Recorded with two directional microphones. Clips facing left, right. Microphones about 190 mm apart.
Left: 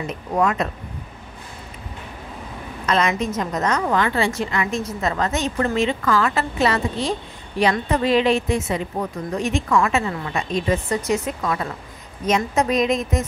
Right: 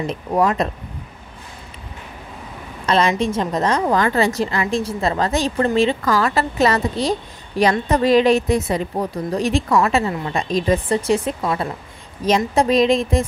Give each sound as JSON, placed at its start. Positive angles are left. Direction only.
{"t": 0.4, "sound": "a woman's voice", "side_deg": -35}
{"t": 2.9, "sound": "a woman's voice", "side_deg": -30}
{"t": 4.0, "sound": "a woman's voice", "side_deg": -40}